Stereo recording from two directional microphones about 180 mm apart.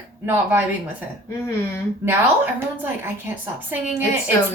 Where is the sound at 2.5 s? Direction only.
10° right (ahead or behind).